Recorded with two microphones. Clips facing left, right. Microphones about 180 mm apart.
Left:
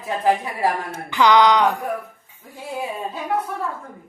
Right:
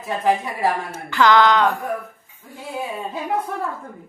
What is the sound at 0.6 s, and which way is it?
A woman's voice, 15° left (ahead or behind).